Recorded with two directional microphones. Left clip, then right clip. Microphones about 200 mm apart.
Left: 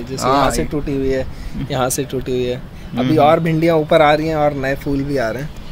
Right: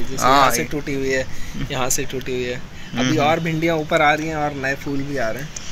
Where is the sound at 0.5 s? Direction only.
25° left (ahead or behind).